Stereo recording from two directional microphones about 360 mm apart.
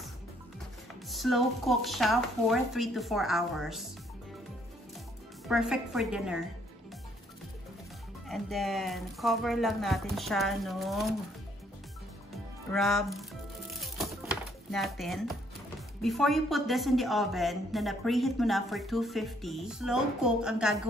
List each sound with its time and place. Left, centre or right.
1.0 s speech: centre
5.5 s speech: centre
8.3 s speech: centre
12.7 s speech: centre
13.7 s music: centre
16.0 s speech: centre